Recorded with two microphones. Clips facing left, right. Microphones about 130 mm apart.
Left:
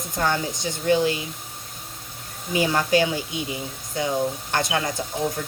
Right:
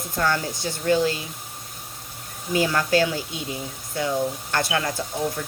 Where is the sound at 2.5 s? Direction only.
20° left (ahead or behind).